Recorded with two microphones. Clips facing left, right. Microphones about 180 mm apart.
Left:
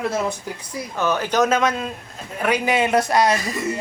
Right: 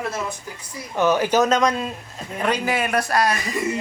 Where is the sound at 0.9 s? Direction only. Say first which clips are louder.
Right 3 dB; 10° right (ahead or behind).